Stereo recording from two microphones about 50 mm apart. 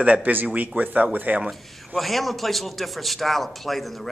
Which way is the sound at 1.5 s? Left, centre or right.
Centre.